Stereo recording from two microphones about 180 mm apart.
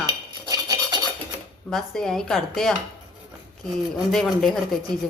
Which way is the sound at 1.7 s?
Centre (ahead or behind).